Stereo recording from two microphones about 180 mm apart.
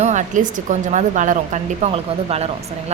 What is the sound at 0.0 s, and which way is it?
A woman's voice, 40° right (ahead or behind).